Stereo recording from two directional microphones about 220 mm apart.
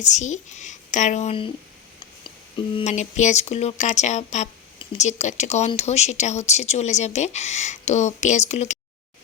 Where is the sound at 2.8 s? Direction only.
30° left (ahead or behind).